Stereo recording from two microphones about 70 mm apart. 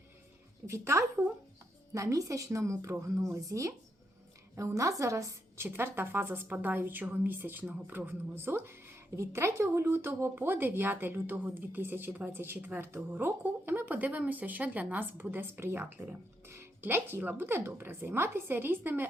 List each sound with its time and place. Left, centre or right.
0.7 s a woman's voice: right
5.6 s a woman's voice: right